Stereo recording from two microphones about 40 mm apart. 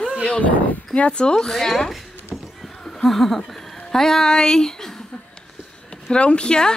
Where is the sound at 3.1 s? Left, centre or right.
Centre.